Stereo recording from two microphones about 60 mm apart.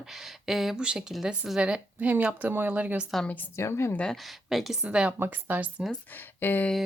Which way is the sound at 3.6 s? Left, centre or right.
Left.